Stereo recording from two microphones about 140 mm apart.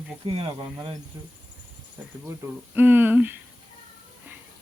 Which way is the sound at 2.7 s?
15° right (ahead or behind).